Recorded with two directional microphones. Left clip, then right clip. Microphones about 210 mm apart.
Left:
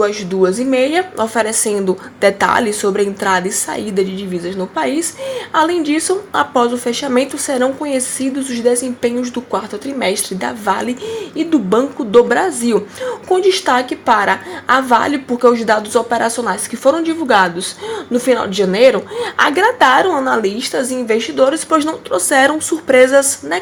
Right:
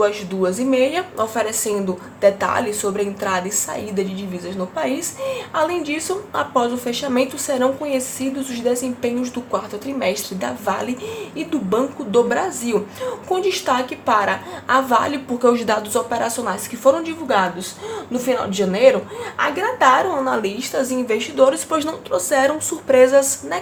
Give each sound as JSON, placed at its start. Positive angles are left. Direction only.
{"t": 0.0, "sound": "a woman's voice", "side_deg": 20}
{"t": 20.1, "sound": "a woman's voice", "side_deg": 20}